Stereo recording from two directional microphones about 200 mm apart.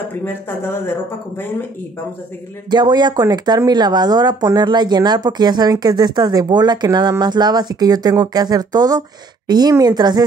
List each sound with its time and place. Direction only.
0.2 s speech: 10° left (ahead or behind)
2.7 s speech: 20° right (ahead or behind)